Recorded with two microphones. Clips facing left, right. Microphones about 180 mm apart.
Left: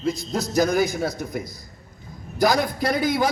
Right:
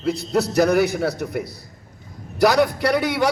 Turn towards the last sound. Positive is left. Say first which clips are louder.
# right 2 dB
turn(degrees=-70)  # may be behind; listen again after turning